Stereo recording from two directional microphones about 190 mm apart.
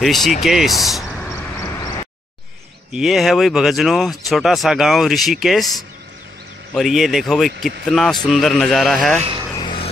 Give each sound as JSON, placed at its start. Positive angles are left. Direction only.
{"t": 0.0, "sound": "speech", "side_deg": 0}
{"t": 2.9, "sound": "speech", "side_deg": 0}
{"t": 9.6, "sound": "a sound", "side_deg": 25}